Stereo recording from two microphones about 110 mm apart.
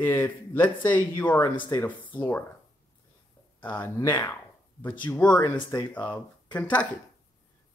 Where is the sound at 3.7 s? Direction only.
20° left (ahead or behind).